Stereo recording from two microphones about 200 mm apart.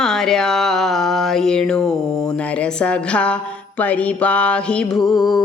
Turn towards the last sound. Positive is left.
turn(degrees=20)  # may be behind; listen again after turning